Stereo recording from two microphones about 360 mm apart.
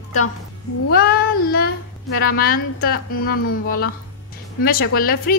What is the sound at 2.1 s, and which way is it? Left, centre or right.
A woman's voice, left.